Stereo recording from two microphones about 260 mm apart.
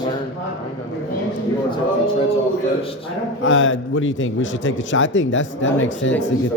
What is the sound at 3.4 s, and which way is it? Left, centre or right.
A man's voice, left.